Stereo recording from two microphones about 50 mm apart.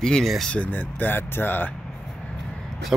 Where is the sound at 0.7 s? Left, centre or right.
Left.